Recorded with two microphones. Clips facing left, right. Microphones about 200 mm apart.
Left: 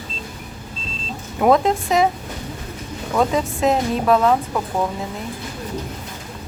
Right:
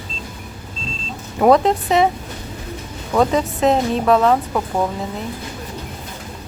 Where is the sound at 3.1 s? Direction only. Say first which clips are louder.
Right 3 dB; centre (ahead or behind).